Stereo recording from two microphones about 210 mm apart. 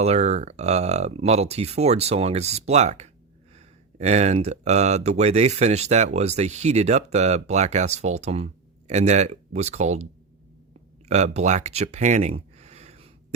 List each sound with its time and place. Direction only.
0.0 s speech: 30° right (ahead or behind)
11.1 s speech: 35° right (ahead or behind)